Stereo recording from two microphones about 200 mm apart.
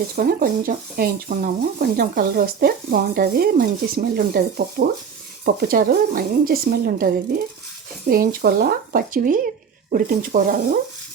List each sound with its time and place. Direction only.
0.2 s speech: 50° right (ahead or behind)